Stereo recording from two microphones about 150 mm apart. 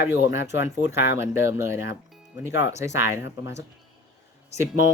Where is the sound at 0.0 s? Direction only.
15° right (ahead or behind).